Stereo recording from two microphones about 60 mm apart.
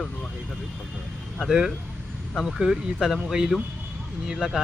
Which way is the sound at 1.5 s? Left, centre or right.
Centre.